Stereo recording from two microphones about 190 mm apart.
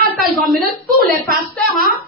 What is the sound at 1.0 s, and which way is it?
Speech, 50° right (ahead or behind).